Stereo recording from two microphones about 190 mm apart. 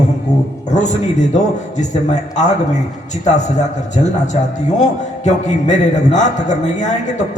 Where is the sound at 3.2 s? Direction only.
40° left (ahead or behind).